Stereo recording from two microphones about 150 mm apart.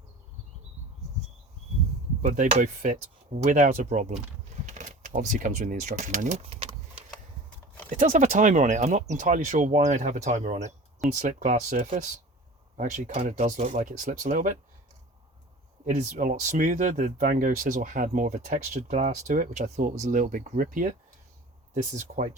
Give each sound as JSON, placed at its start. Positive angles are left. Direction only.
{"t": 2.2, "sound": "speech", "side_deg": -60}
{"t": 7.9, "sound": "speech", "side_deg": -60}
{"t": 15.9, "sound": "speech", "side_deg": -55}